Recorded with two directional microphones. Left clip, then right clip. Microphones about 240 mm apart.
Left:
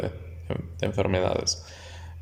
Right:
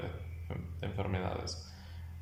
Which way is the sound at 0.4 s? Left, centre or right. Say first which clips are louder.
Left 14 dB; left.